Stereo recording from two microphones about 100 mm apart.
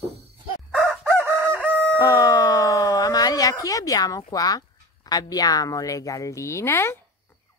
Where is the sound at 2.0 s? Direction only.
35° left (ahead or behind).